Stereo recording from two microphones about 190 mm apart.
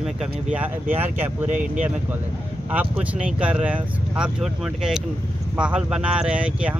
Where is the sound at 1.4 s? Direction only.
40° right (ahead or behind).